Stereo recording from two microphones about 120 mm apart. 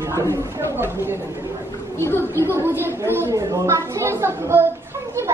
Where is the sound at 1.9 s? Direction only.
20° left (ahead or behind).